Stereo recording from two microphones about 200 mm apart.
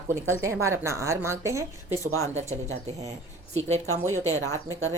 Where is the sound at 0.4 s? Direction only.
15° right (ahead or behind).